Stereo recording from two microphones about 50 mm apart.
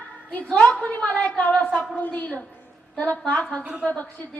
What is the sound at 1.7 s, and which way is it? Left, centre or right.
Speech, centre.